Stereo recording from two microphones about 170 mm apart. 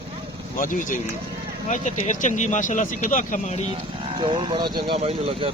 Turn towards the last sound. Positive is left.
turn(degrees=-35)  # may be behind; listen again after turning